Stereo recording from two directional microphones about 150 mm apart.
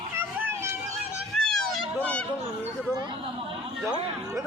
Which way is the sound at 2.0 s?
10° left (ahead or behind).